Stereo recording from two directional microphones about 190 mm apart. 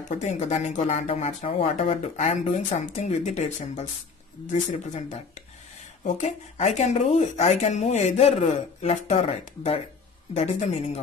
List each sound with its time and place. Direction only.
0.1 s speech: 40° left (ahead or behind)